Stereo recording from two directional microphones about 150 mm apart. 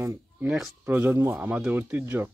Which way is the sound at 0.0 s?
20° right (ahead or behind).